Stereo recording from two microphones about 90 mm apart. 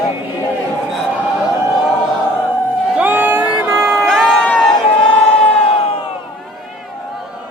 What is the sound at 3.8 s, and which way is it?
Vehicle, centre (ahead or behind).